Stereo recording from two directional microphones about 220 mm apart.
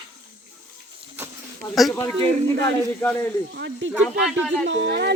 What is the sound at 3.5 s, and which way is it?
Speech, 50° right (ahead or behind).